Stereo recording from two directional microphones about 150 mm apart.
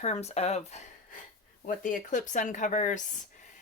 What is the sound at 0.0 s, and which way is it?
Speech, 45° left (ahead or behind).